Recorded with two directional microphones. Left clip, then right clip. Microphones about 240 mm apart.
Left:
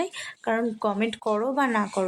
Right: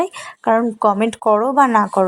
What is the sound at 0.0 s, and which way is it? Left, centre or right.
Speech, right.